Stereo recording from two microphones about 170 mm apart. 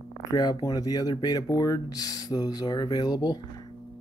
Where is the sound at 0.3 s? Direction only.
25° left (ahead or behind).